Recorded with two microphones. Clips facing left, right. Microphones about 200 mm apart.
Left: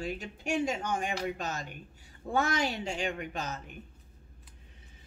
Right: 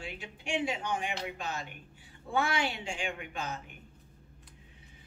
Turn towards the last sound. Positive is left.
turn(degrees=40)  # may be behind; listen again after turning